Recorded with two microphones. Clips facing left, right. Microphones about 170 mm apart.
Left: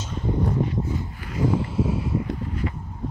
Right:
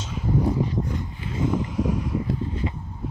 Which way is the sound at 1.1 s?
25° right (ahead or behind).